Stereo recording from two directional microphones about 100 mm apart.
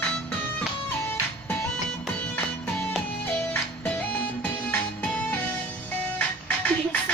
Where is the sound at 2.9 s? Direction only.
10° left (ahead or behind).